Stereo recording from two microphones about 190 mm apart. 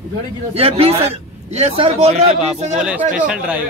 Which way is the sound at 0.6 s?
30° right (ahead or behind).